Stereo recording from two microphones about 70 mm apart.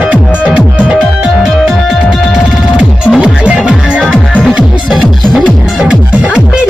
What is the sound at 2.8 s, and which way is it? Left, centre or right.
Music, centre.